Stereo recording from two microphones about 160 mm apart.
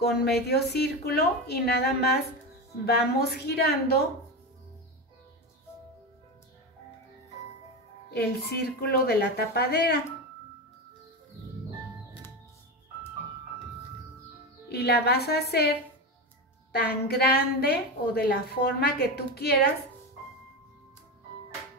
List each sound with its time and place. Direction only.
0.0 s a woman's voice: 90° left
8.1 s a woman's voice: 90° left
14.7 s a woman's voice: 90° left
16.8 s a woman's voice: 85° left